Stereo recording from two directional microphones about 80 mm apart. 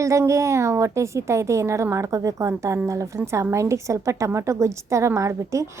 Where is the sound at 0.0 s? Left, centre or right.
Right.